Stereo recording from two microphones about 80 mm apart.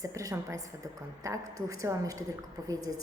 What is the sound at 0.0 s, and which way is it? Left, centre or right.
A woman's voice, right.